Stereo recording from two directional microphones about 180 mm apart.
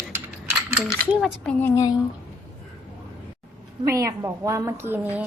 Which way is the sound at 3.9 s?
15° right (ahead or behind).